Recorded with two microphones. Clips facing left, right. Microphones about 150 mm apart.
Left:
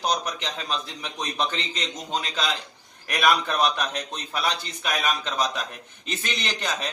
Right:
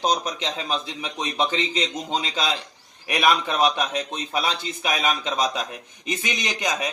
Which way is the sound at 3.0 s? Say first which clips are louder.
Right 1 dB; 10° right (ahead or behind).